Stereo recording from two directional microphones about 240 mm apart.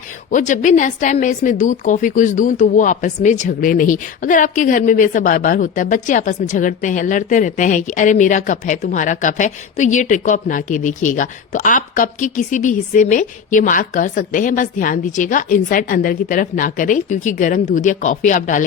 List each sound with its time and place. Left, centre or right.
0.3 s a woman's voice: left